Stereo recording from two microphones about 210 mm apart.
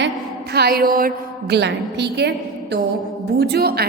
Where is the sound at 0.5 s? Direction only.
50° right (ahead or behind).